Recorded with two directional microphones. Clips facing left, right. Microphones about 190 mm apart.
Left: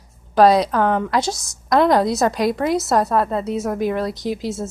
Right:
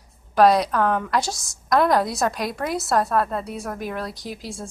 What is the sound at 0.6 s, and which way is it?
A woman's voice, 25° left (ahead or behind).